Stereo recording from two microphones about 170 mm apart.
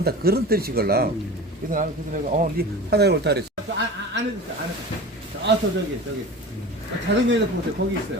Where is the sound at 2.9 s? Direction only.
75° right (ahead or behind).